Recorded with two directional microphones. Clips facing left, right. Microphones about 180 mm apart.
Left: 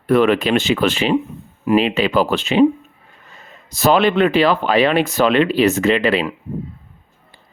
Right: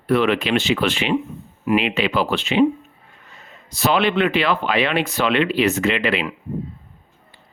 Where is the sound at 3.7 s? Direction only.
45° left (ahead or behind).